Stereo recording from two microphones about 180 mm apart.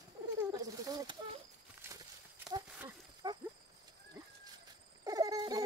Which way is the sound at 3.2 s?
25° right (ahead or behind).